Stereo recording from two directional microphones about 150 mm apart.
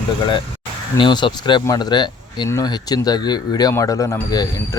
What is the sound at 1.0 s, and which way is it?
Speech, 30° left (ahead or behind).